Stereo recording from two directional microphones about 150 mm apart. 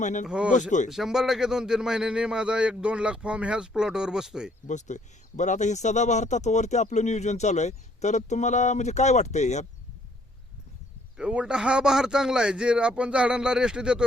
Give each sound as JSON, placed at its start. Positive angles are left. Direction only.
{"t": 0.0, "sound": "speech", "side_deg": 55}
{"t": 0.3, "sound": "speech", "side_deg": -5}
{"t": 4.6, "sound": "speech", "side_deg": 55}
{"t": 11.2, "sound": "speech", "side_deg": -5}